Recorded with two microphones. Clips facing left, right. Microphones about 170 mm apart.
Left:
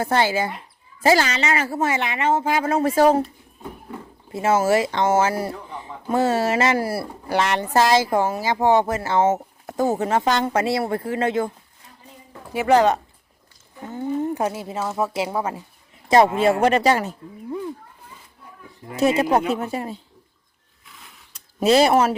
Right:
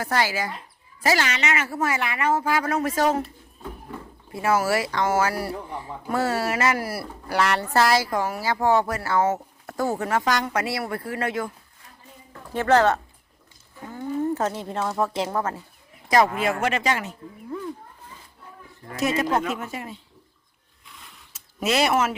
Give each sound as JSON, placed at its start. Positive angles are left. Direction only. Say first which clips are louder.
{"t": 0.0, "sound": "speech", "louder": "left 4 dB", "side_deg": 25}
{"t": 4.3, "sound": "speech", "louder": "left 4 dB", "side_deg": 25}
{"t": 12.3, "sound": "speech", "louder": "left 2 dB", "side_deg": 15}
{"t": 16.0, "sound": "speech", "louder": "left 5 dB", "side_deg": 25}
{"t": 18.9, "sound": "speech", "louder": "left 5 dB", "side_deg": 30}
{"t": 20.8, "sound": "a sound", "louder": "even", "side_deg": 0}
{"t": 21.6, "sound": "speech", "louder": "left 6 dB", "side_deg": 30}